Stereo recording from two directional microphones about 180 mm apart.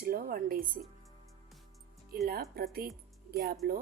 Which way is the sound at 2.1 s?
60° right (ahead or behind).